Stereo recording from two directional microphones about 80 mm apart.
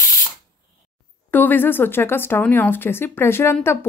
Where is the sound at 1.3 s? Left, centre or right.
Left.